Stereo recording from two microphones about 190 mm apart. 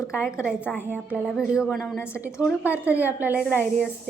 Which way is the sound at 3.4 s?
10° left (ahead or behind).